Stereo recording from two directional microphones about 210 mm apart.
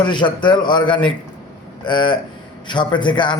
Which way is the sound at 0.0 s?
20° left (ahead or behind).